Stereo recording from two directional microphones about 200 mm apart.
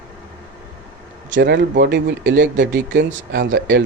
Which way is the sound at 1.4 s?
60° right (ahead or behind).